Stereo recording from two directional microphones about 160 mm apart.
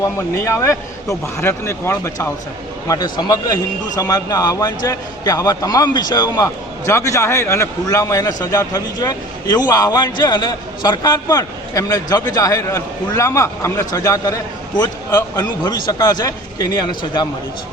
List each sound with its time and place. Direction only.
0.0 s a man's voice: 20° left (ahead or behind)